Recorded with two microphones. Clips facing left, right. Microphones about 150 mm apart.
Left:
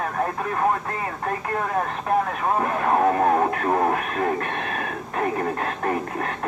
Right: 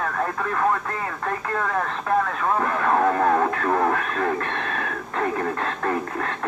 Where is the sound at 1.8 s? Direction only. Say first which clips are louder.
Even; 25° left (ahead or behind).